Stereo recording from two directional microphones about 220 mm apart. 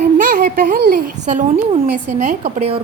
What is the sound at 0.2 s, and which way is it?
A woman's voice, 40° right (ahead or behind).